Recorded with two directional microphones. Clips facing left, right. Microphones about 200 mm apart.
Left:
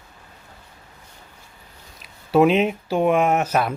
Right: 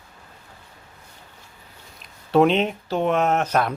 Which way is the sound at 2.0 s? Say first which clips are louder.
Left 1 dB; 5° left (ahead or behind).